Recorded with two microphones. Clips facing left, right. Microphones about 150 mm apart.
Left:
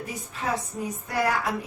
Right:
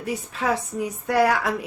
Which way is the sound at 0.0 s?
75° right (ahead or behind).